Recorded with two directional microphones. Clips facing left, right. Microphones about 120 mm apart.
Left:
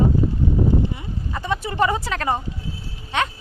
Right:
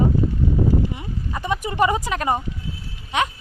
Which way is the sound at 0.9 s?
20° right (ahead or behind).